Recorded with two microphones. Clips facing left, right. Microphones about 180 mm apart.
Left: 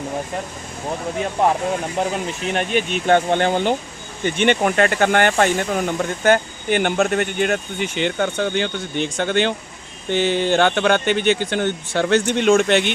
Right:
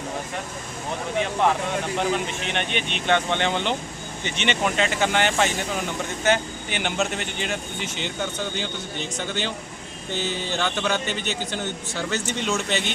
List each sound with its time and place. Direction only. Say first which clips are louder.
1.4 s speech: left 5 dB; 40° left (ahead or behind); by 12.9 s 65° left (ahead or behind)